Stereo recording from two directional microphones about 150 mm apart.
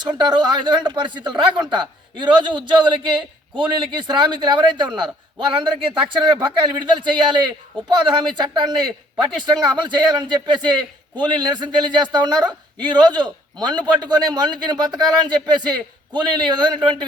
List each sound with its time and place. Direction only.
0.0 s speech: 30° right (ahead or behind)